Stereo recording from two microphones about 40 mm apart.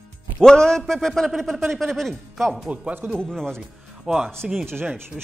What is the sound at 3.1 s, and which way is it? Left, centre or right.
Speech, centre.